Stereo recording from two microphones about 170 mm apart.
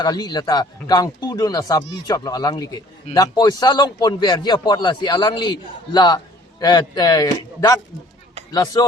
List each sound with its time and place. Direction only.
0.0 s a man's voice: 25° left (ahead or behind)